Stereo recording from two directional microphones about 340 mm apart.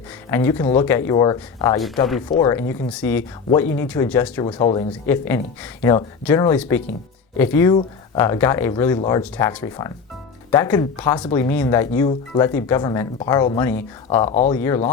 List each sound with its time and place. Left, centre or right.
0.3 s speech: centre
14.3 s speech: centre